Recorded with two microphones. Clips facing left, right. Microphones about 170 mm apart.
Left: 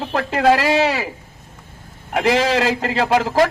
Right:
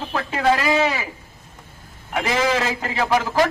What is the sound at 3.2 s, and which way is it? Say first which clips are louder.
Speech: left 3 dB; 30° left (ahead or behind).